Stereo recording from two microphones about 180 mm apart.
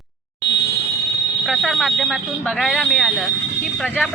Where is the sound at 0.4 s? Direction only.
70° left (ahead or behind).